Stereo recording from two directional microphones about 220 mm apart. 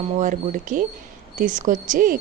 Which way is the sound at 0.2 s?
35° right (ahead or behind).